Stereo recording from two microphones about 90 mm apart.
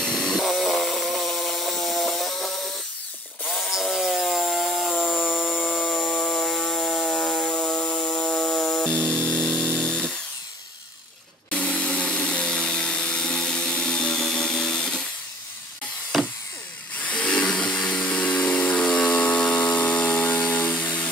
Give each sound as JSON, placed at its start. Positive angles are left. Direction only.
{"t": 0.0, "sound": "chainsaw", "side_deg": 5}
{"t": 3.4, "sound": "wood", "side_deg": 0}
{"t": 5.1, "sound": "a sound", "side_deg": -5}
{"t": 5.6, "sound": "tools", "side_deg": 15}
{"t": 5.9, "sound": "tools", "side_deg": -5}
{"t": 6.1, "sound": "a sound", "side_deg": 10}
{"t": 11.5, "sound": "tools", "side_deg": 15}
{"t": 16.9, "sound": "chainsaw", "side_deg": 15}